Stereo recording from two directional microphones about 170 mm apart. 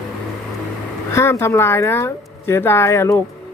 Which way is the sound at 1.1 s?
15° left (ahead or behind).